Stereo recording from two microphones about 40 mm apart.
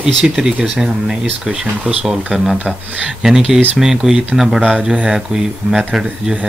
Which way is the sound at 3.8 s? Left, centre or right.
Centre.